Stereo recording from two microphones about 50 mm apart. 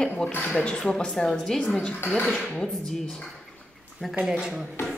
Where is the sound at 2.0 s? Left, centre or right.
Left.